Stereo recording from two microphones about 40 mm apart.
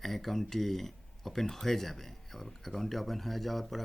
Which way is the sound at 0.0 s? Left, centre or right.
Centre.